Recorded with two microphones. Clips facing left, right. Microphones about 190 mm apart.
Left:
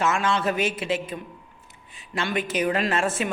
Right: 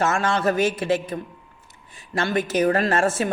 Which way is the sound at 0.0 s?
45° right (ahead or behind).